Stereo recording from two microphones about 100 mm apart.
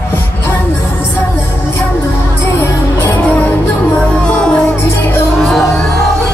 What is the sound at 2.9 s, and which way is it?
Music, 20° left (ahead or behind).